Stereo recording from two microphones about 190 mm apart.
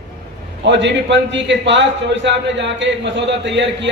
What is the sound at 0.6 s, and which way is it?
A man's voice, 70° right (ahead or behind).